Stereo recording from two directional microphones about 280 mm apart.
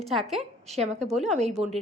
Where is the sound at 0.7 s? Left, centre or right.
Right.